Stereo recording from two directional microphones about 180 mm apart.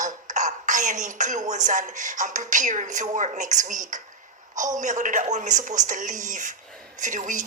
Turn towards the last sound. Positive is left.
turn(degrees=-45)  # may be behind; listen again after turning